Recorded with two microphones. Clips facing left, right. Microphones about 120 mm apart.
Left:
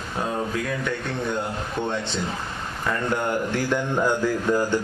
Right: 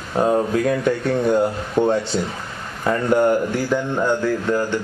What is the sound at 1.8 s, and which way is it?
Speech, 40° right (ahead or behind).